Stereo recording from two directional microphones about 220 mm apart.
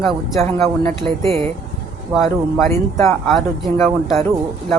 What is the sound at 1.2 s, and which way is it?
Speech, 25° right (ahead or behind).